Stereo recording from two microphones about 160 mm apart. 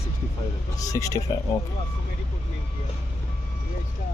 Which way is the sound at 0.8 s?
20° left (ahead or behind).